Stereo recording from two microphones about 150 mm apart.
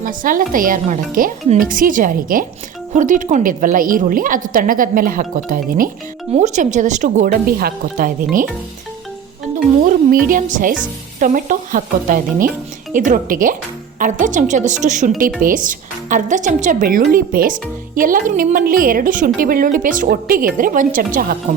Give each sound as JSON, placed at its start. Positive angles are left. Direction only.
{"t": 0.0, "sound": "a woman's voice", "side_deg": -65}
{"t": 6.3, "sound": "a woman's voice", "side_deg": -50}
{"t": 9.8, "sound": "a woman's voice", "side_deg": -65}
{"t": 15.4, "sound": "speech", "side_deg": -65}